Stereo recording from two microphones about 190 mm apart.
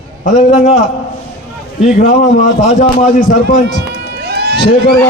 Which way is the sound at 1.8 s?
40° left (ahead or behind).